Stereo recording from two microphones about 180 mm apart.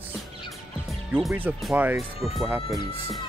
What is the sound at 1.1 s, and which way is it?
Speech, 10° right (ahead or behind).